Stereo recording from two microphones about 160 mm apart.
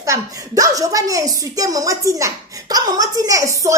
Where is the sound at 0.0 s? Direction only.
20° right (ahead or behind).